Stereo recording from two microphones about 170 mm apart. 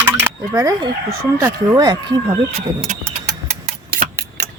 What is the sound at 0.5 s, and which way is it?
Speech, 20° right (ahead or behind).